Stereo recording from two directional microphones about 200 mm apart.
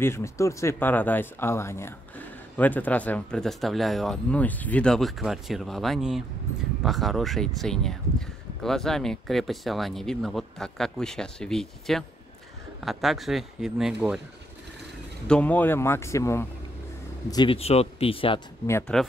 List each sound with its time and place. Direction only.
0.0 s speech: 15° left (ahead or behind); by 14.2 s 5° right (ahead or behind)
15.2 s speech: 5° left (ahead or behind); by 18.4 s 25° left (ahead or behind)
18.7 s speech: 10° left (ahead or behind)